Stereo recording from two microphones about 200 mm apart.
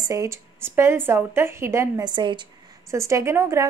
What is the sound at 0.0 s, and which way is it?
A woman's voice, 15° right (ahead or behind).